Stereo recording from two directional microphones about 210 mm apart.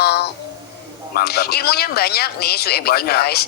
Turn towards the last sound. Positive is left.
turn(degrees=50)  # may be behind; listen again after turning